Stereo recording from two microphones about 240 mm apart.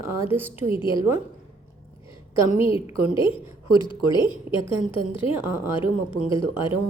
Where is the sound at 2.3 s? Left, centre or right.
Left.